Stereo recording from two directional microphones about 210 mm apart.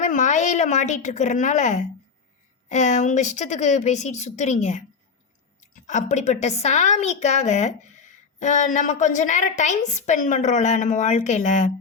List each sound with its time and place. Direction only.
0.0 s a woman's voice: 35° left (ahead or behind)